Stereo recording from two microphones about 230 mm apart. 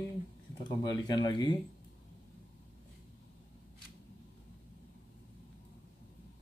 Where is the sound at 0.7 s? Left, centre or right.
Centre.